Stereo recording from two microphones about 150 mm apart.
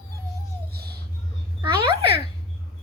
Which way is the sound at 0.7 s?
90° right.